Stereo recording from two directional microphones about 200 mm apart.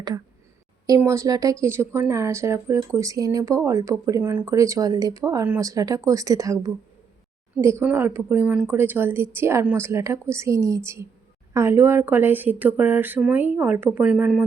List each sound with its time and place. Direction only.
0.9 s speech: 15° right (ahead or behind)